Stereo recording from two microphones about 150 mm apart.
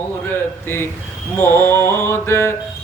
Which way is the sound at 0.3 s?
15° left (ahead or behind).